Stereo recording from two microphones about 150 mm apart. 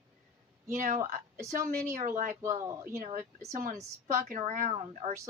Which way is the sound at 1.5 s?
60° right (ahead or behind).